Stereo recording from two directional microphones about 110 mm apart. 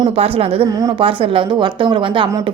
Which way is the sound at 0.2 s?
60° right (ahead or behind).